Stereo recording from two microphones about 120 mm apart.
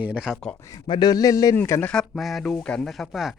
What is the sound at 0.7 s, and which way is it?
A man's voice, 35° left (ahead or behind).